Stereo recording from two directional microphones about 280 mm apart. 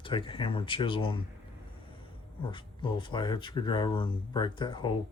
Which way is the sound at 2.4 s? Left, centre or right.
Centre.